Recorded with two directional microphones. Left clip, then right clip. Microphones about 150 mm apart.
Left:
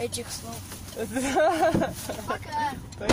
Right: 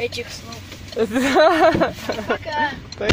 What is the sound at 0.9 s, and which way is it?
Speech, 55° right (ahead or behind).